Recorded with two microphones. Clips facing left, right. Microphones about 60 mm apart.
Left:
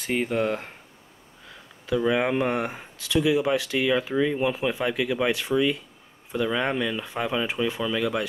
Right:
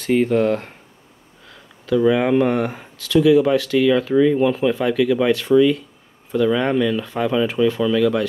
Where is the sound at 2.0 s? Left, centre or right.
Centre.